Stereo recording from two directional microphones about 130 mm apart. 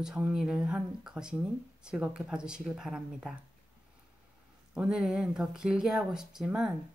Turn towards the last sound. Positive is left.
turn(degrees=-5)  # may be behind; listen again after turning